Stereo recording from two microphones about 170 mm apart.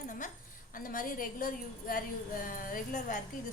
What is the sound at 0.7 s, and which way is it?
A woman's voice, 55° left (ahead or behind).